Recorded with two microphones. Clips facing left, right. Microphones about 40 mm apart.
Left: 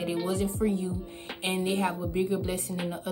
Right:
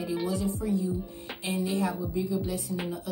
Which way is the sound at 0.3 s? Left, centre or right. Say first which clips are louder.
Left 1 dB; left.